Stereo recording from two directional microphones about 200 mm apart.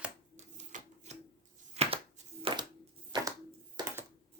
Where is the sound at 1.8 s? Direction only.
35° right (ahead or behind).